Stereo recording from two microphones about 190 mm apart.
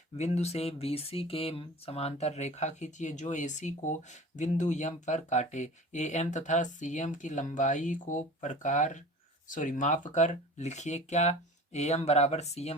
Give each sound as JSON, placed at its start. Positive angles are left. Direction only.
{"t": 0.2, "sound": "speech", "side_deg": 35}